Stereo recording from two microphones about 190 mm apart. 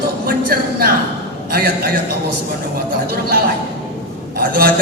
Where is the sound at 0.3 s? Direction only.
50° right (ahead or behind).